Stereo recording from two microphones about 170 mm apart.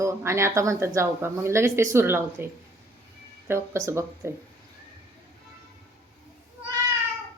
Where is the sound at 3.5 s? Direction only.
15° right (ahead or behind).